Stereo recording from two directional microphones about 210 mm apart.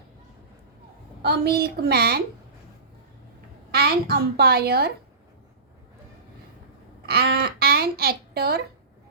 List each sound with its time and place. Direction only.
1.2 s a woman's voice: 50° right (ahead or behind)
3.7 s a woman's voice: 45° right (ahead or behind)
7.0 s speech: 50° right (ahead or behind)